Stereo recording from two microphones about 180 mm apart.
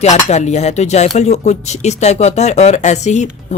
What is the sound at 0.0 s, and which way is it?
Speech, 40° left (ahead or behind).